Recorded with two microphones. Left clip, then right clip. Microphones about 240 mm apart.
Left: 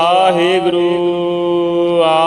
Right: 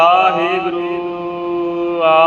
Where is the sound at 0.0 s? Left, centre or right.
Left.